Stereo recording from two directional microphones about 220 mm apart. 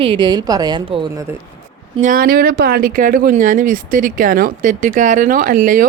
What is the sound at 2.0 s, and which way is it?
Speech, 40° right (ahead or behind).